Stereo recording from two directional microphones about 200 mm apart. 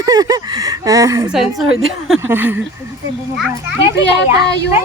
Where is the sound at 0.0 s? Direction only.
20° right (ahead or behind).